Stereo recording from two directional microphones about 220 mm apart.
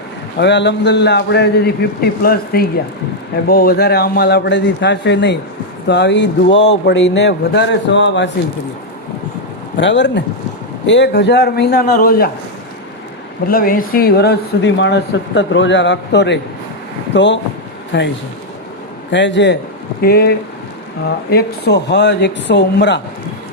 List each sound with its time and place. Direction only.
0.3 s speech: 50° left (ahead or behind)
9.7 s speech: 55° left (ahead or behind)
13.5 s a man's voice: 40° left (ahead or behind)
19.1 s a man's voice: 55° left (ahead or behind)